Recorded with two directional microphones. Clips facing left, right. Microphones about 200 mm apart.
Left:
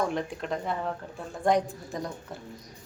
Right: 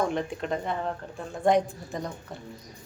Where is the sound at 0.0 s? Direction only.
Centre (ahead or behind).